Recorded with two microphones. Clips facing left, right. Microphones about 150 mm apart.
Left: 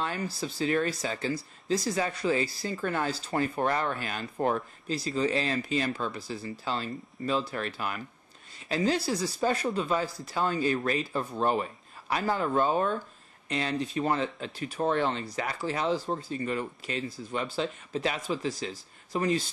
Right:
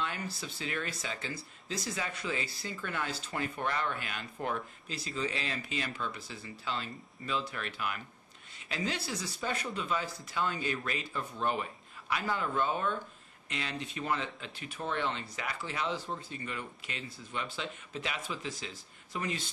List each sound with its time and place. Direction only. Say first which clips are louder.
0.0 s speech: left 5 dB; 40° left (ahead or behind)